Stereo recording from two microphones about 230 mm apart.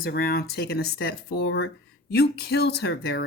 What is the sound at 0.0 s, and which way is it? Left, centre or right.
Speech, left.